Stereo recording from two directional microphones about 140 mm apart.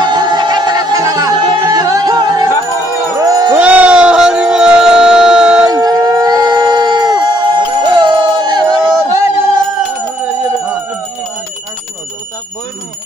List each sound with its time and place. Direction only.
0.0 s music: 30° right (ahead or behind)
3.2 s a sound: 25° right (ahead or behind)
3.5 s music: 10° right (ahead or behind)
5.7 s howl: 25° right (ahead or behind)